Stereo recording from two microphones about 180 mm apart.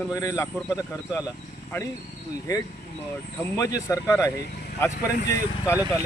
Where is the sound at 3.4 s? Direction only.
20° left (ahead or behind).